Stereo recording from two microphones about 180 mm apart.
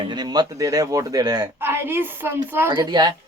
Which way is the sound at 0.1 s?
25° right (ahead or behind).